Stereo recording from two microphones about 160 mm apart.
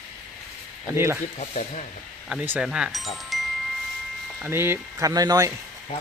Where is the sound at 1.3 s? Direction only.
45° left (ahead or behind).